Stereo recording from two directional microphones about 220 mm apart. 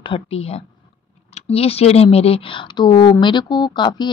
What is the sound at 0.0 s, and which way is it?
Speech, 25° left (ahead or behind).